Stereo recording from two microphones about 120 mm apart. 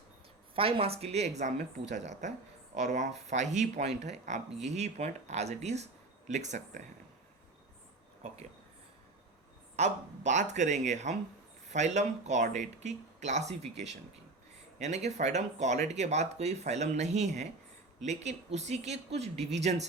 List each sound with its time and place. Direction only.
0.5 s speech: 55° right (ahead or behind); by 6.8 s 80° right
8.2 s speech: 60° right (ahead or behind)
9.7 s speech: 75° right (ahead or behind)